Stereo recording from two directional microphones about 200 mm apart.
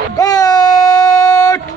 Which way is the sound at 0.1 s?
20° left (ahead or behind).